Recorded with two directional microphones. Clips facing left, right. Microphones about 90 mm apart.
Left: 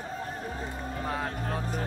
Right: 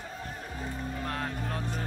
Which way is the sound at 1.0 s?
5° left (ahead or behind).